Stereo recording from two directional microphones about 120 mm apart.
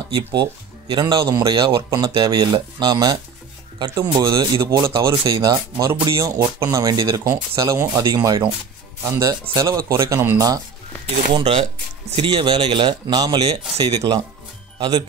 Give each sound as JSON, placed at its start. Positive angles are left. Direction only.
{"t": 0.8, "sound": "speech", "side_deg": -40}
{"t": 11.3, "sound": "speech", "side_deg": -50}
{"t": 12.2, "sound": "speech", "side_deg": -40}
{"t": 13.4, "sound": "speech", "side_deg": -55}